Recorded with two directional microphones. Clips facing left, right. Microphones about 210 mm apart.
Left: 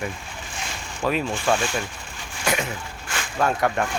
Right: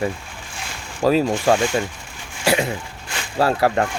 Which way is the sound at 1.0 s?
35° right (ahead or behind).